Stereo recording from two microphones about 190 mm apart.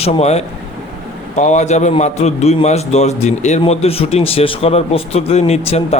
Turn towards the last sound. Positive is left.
turn(degrees=35)  # may be behind; listen again after turning